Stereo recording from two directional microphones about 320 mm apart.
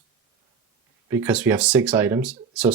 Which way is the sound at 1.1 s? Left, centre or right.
Centre.